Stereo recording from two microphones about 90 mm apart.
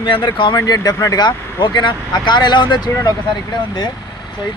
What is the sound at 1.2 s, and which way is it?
Speech, 55° left (ahead or behind).